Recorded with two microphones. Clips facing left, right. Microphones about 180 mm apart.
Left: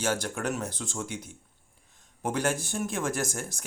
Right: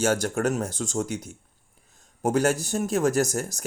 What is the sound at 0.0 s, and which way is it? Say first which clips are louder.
Speech: right 6 dB; 45° right (ahead or behind).